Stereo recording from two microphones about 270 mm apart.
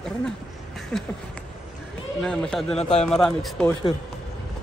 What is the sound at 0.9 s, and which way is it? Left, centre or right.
Speech, centre.